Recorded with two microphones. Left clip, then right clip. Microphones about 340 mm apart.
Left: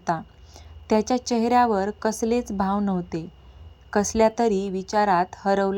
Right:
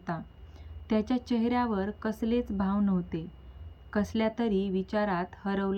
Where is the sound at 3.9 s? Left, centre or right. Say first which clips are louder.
Left 10 dB; centre.